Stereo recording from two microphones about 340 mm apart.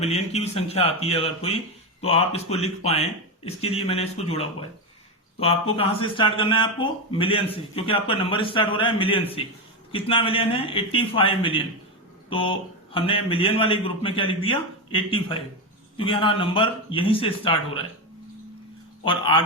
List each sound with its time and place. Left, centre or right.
0.0 s a man's voice: centre
5.7 s a man's voice: centre
19.0 s a man's voice: centre